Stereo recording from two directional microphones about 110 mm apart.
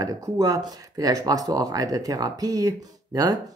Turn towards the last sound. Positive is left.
turn(degrees=-35)  # may be behind; listen again after turning